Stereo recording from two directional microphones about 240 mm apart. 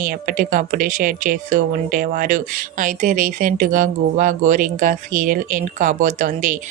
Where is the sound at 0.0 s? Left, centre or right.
Right.